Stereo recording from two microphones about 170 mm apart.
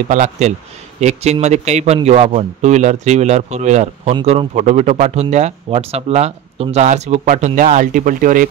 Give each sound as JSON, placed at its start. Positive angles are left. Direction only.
{"t": 0.1, "sound": "speech", "side_deg": -45}